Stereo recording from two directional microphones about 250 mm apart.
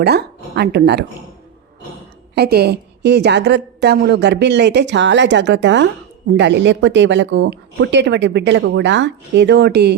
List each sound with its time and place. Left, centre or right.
0.0 s a woman's voice: right
2.3 s speech: right